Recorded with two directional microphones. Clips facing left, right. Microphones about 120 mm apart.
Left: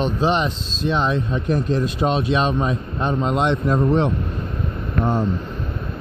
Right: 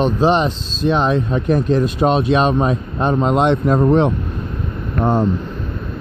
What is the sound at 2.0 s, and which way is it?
Speech, 50° right (ahead or behind).